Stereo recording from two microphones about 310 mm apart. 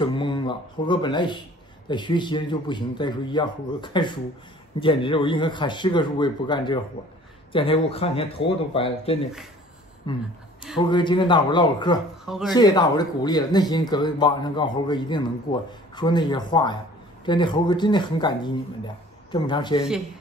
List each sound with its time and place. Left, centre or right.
0.0 s a man's voice: centre
12.3 s speech: centre
12.5 s a man's voice: centre